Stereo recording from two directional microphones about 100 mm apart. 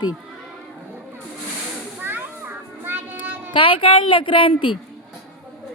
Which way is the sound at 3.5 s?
60° left (ahead or behind).